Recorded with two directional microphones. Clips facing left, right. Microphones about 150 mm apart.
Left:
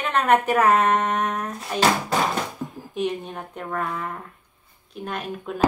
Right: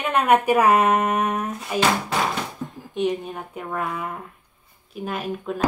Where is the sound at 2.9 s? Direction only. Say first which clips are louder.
Right 3 dB; centre (ahead or behind).